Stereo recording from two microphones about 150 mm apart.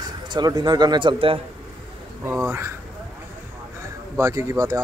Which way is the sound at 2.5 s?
15° right (ahead or behind).